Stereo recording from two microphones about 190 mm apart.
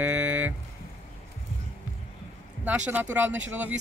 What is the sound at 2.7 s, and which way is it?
Speech, 5° right (ahead or behind).